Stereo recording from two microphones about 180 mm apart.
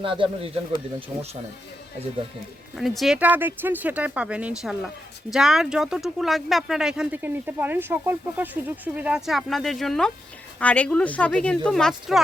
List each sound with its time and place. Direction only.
0.0 s speech: 30° right (ahead or behind)
2.7 s speech: centre (ahead or behind)